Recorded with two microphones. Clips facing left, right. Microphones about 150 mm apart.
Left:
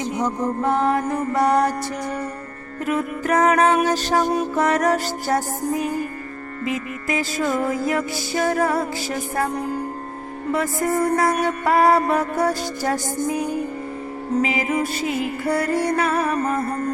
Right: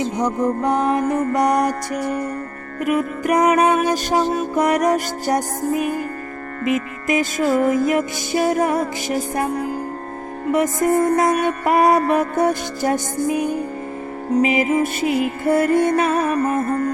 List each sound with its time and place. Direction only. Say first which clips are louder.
0.2 s music: right 2 dB; 15° right (ahead or behind)
7.1 s music: right 4 dB; 20° right (ahead or behind)
10.5 s music: right 5 dB; 20° right (ahead or behind)